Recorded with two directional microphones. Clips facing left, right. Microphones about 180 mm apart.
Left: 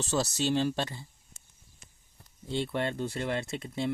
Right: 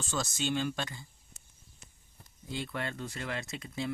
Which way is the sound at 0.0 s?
40° left (ahead or behind).